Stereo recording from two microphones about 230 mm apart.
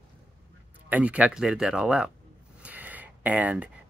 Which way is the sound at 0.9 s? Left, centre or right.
Centre.